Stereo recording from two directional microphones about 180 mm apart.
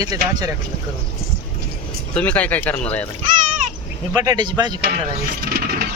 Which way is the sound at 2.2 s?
10° left (ahead or behind).